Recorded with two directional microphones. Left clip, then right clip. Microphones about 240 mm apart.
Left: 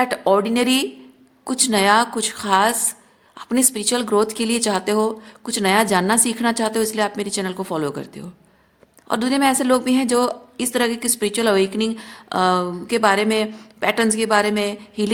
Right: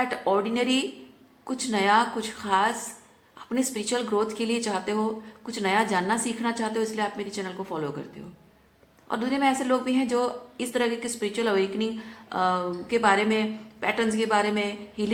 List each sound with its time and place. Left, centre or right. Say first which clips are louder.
0.0 s a woman's voice: left 7 dB; left